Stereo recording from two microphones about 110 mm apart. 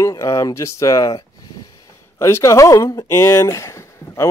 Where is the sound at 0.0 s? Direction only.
30° left (ahead or behind).